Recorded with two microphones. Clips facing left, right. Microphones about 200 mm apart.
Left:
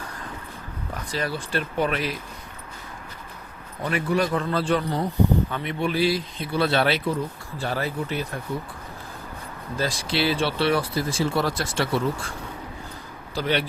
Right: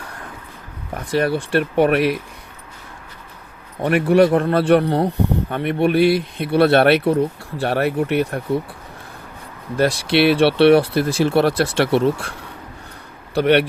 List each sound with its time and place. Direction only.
0.9 s speech: 60° right (ahead or behind)
3.8 s speech: 65° right (ahead or behind)
9.7 s speech: 65° right (ahead or behind)
13.3 s speech: 65° right (ahead or behind)